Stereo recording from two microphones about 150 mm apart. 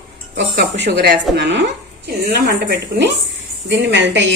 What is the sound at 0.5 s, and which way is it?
A woman's voice, 90° right.